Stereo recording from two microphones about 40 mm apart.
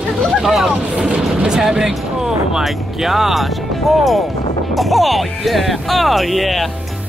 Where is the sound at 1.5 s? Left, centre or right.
Centre.